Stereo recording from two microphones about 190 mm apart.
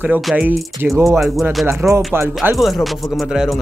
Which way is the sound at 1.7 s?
10° right (ahead or behind).